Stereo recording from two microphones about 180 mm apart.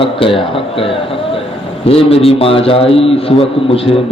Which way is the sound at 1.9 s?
35° left (ahead or behind).